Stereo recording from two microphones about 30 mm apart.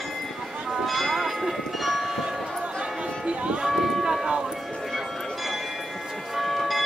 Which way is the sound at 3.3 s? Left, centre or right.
Right.